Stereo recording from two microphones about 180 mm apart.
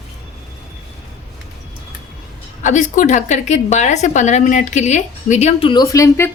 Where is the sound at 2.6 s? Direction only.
45° left (ahead or behind).